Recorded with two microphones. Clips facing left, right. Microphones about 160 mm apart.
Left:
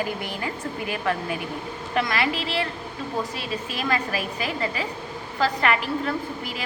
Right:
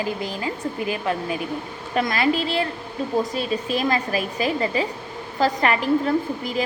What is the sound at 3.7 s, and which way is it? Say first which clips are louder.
A woman's voice: right 3 dB; 35° right (ahead or behind).